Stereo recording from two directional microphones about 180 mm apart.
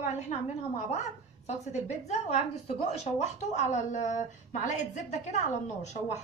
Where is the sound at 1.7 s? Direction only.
40° left (ahead or behind).